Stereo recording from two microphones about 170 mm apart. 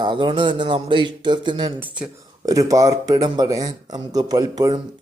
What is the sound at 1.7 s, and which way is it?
Speech, 10° right (ahead or behind).